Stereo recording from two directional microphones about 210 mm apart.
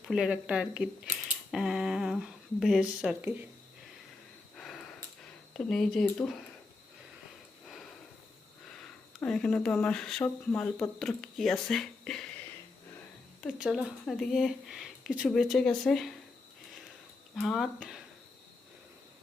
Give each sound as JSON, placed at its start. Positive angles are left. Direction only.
{"t": 0.1, "sound": "speech", "side_deg": -5}
{"t": 4.5, "sound": "a sound", "side_deg": 0}
{"t": 5.5, "sound": "speech", "side_deg": 0}
{"t": 9.2, "sound": "speech", "side_deg": 5}
{"t": 13.4, "sound": "speech", "side_deg": 0}
{"t": 17.4, "sound": "speech", "side_deg": 0}